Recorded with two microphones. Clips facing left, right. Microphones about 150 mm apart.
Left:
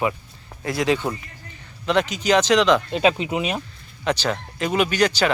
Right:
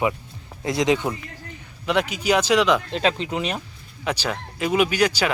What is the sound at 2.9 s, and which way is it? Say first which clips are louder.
Speech: left 3 dB; 10° left (ahead or behind).